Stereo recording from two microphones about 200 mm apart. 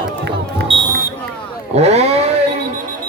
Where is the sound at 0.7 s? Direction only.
25° right (ahead or behind).